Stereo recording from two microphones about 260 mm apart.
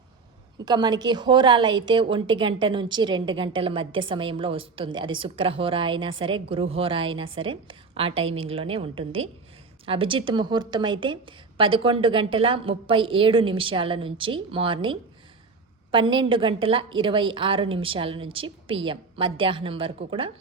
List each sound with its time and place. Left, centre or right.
0.6 s a woman's voice: centre